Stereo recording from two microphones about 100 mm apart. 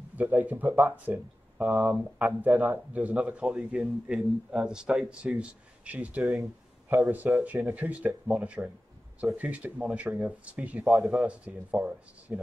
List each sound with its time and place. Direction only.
0.1 s a man's voice: 15° right (ahead or behind)
10.9 s speech: centre (ahead or behind)
11.2 s a man's voice: 15° right (ahead or behind)